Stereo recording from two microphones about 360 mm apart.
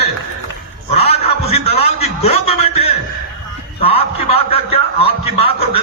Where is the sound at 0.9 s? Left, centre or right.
Centre.